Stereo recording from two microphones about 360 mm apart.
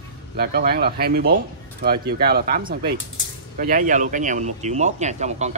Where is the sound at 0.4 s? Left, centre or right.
Right.